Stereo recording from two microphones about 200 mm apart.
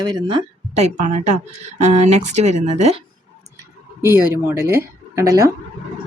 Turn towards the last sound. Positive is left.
turn(degrees=-15)  # may be behind; listen again after turning